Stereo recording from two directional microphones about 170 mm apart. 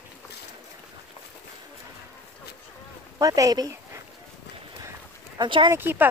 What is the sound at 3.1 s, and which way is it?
Speech, 20° right (ahead or behind).